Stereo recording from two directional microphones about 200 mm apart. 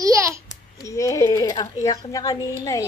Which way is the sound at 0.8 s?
15° left (ahead or behind).